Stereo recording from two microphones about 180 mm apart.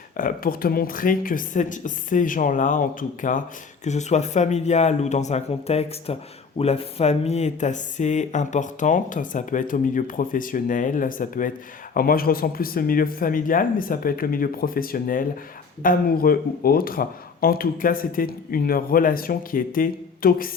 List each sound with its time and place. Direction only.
0.2 s speech: 50° left (ahead or behind)